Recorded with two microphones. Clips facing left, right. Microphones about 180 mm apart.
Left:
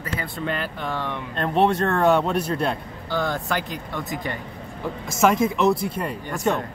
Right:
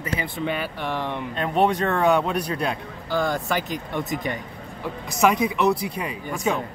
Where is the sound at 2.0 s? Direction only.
Centre (ahead or behind).